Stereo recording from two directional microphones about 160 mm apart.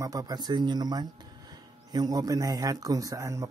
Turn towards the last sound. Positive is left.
turn(degrees=-20)  # may be behind; listen again after turning